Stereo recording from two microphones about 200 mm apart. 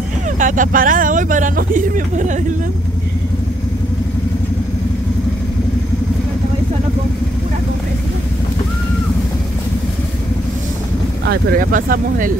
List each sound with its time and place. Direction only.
0.4 s speech: 40° right (ahead or behind)
11.2 s speech: 45° right (ahead or behind)